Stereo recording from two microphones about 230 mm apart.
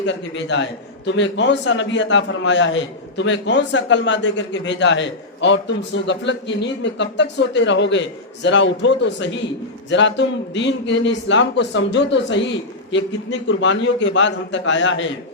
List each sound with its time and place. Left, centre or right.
0.0 s a man's voice: left